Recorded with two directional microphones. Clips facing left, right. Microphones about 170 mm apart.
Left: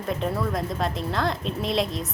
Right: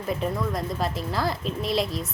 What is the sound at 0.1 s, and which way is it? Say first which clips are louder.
A woman's voice: left 1 dB; centre (ahead or behind).